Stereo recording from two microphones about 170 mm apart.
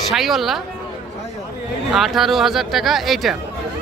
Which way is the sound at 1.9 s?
Centre (ahead or behind).